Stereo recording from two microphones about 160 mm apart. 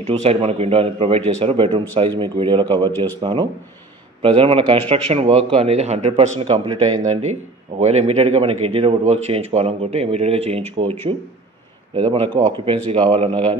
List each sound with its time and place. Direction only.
0.0 s a man's voice: 40° right (ahead or behind)
7.0 s a man's voice: 45° right (ahead or behind)